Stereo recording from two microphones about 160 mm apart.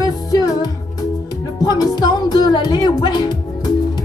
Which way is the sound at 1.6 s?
25° left (ahead or behind).